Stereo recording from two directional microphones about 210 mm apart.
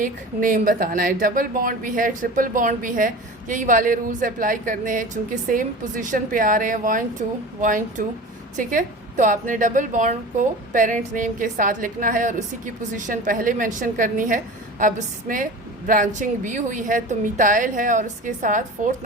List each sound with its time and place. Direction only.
0.0 s a woman's voice: 40° right (ahead or behind)